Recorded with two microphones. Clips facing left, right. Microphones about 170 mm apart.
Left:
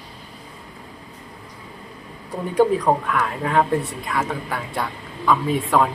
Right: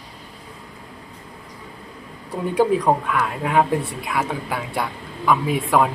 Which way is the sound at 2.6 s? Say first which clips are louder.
Left 1 dB; 10° right (ahead or behind).